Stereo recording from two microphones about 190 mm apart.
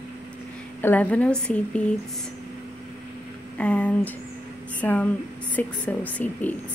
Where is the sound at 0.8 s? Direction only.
10° left (ahead or behind).